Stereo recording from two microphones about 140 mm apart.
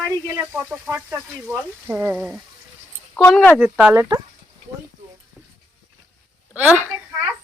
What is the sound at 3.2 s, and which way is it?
Speech, 5° left (ahead or behind).